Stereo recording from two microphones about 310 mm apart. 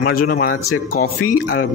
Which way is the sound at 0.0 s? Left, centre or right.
Left.